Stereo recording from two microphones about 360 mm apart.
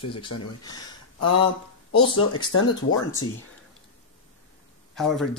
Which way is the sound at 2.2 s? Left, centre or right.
Left.